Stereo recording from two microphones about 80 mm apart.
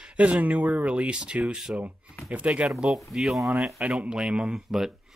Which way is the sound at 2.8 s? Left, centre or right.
Centre.